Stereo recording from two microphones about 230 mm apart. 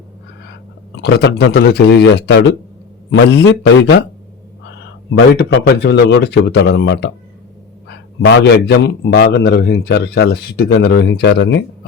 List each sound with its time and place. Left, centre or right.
1.0 s a man's voice: left
5.1 s a man's voice: left